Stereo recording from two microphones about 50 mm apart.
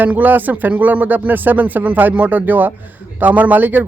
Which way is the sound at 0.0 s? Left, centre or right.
Right.